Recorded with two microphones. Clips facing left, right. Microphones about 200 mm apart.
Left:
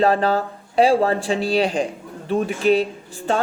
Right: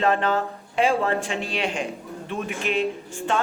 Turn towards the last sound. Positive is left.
turn(degrees=35)  # may be behind; listen again after turning